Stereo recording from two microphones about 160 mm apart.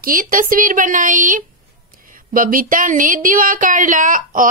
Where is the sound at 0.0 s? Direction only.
60° right (ahead or behind).